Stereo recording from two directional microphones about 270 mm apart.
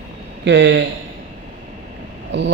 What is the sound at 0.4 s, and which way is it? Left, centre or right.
Speech, right.